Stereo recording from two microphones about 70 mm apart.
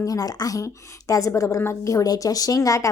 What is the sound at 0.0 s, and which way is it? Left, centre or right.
A woman's voice, left.